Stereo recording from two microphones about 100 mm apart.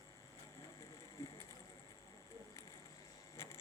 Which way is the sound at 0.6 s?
30° left (ahead or behind).